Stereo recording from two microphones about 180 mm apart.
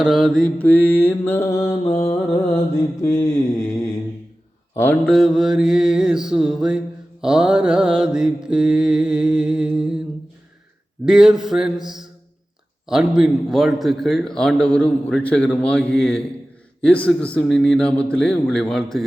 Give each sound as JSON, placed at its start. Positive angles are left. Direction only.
{"t": 0.0, "sound": "mantra", "side_deg": 0}
{"t": 4.7, "sound": "mantra", "side_deg": 10}
{"t": 11.0, "sound": "mantra", "side_deg": -5}